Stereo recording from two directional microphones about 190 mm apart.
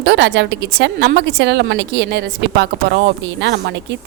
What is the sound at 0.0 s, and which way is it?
A woman's voice, 65° right (ahead or behind).